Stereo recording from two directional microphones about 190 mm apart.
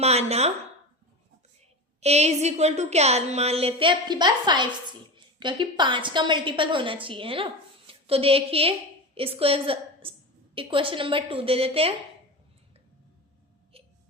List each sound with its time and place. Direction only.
0.0 s speech: 35° right (ahead or behind)
2.0 s a woman's voice: 35° right (ahead or behind)
13.7 s wail: 30° right (ahead or behind)